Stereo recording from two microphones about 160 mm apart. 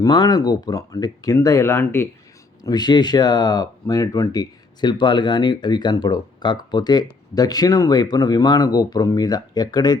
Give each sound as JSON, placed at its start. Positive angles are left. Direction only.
{"t": 0.0, "sound": "speech", "side_deg": 25}
{"t": 2.6, "sound": "speech", "side_deg": 25}